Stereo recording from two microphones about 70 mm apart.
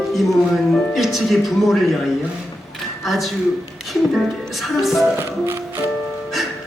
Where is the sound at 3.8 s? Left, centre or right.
Centre.